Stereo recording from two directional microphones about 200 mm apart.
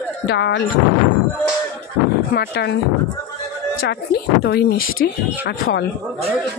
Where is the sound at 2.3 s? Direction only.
55° left (ahead or behind).